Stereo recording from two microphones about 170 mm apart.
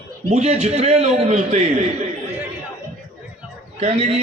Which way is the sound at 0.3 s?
40° right (ahead or behind).